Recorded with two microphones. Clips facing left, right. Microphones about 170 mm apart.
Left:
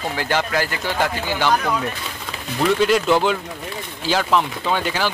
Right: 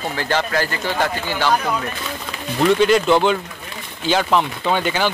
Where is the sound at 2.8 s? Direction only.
5° left (ahead or behind).